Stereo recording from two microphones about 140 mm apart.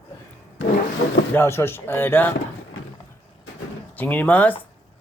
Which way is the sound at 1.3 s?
15° left (ahead or behind).